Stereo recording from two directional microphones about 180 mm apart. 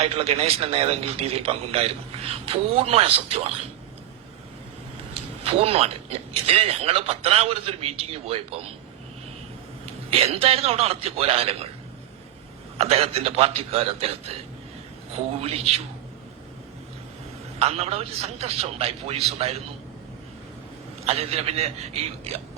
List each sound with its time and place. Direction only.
0.0 s a man's voice: 35° right (ahead or behind)
5.4 s a man's voice: 35° right (ahead or behind)
9.8 s a man's voice: 35° right (ahead or behind)
12.7 s a man's voice: 35° right (ahead or behind)
17.6 s a man's voice: 35° right (ahead or behind)
21.0 s a man's voice: 35° right (ahead or behind)